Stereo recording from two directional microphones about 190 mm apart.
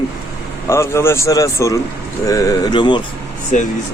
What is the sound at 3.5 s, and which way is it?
Speech, 40° left (ahead or behind).